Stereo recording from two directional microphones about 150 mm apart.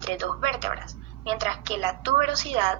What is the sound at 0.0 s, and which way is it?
Speech, 40° right (ahead or behind).